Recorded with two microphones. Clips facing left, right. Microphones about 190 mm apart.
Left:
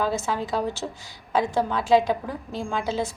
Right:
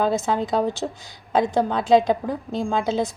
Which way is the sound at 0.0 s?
20° right (ahead or behind).